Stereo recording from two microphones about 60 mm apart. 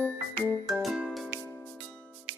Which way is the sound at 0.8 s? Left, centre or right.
Centre.